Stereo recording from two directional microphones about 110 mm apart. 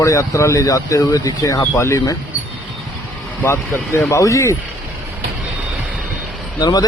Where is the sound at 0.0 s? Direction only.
30° left (ahead or behind).